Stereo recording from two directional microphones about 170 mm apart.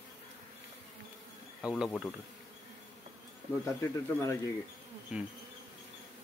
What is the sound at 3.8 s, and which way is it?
Speech, 20° left (ahead or behind).